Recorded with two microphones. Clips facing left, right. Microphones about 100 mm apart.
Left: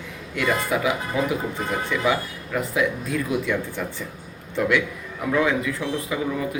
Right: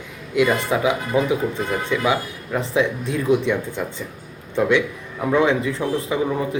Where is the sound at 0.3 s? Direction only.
20° right (ahead or behind).